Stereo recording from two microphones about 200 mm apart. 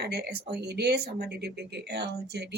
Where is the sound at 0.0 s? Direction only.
55° right (ahead or behind).